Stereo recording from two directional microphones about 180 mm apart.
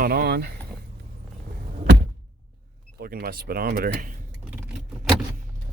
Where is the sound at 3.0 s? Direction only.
55° right (ahead or behind).